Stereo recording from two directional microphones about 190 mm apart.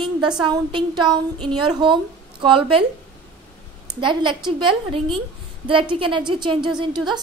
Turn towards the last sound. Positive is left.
turn(degrees=-25)  # may be behind; listen again after turning